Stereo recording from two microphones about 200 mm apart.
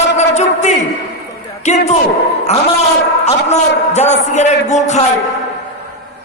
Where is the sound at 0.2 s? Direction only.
35° left (ahead or behind).